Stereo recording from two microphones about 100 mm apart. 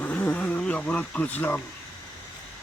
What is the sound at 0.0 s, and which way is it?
Vehicle, 15° left (ahead or behind).